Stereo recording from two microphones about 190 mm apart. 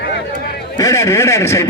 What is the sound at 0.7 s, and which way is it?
Speech, 15° left (ahead or behind).